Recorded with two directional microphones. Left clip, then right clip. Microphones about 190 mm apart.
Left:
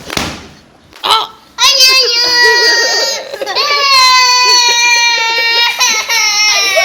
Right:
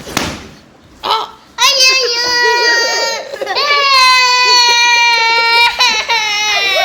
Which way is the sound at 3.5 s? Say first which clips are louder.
Left 1 dB; 15° right (ahead or behind).